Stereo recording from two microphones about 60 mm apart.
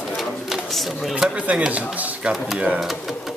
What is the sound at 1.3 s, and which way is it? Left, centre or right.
Speech, right.